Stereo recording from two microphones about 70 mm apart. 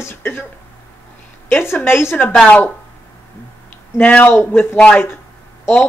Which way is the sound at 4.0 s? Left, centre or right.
Left.